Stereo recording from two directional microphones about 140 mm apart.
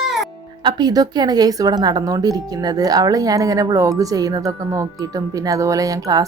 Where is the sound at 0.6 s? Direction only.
30° right (ahead or behind).